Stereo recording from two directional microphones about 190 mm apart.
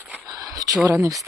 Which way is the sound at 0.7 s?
10° right (ahead or behind).